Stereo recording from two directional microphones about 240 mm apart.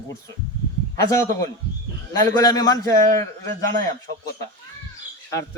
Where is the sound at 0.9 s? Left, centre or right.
Centre.